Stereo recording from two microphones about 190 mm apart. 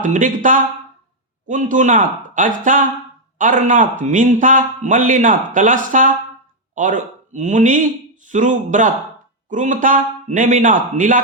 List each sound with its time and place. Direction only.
0.0 s a man's voice: 45° right (ahead or behind)